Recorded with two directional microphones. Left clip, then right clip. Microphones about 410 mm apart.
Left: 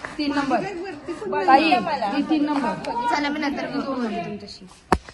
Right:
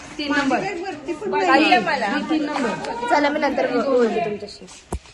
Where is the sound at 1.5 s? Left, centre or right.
Left.